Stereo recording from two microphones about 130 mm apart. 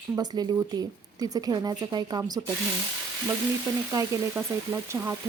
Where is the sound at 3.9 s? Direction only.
25° right (ahead or behind).